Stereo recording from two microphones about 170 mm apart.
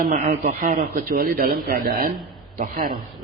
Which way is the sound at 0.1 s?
45° right (ahead or behind).